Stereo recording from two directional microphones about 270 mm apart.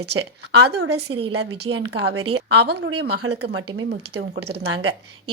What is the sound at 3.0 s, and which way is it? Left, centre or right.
Speech, right.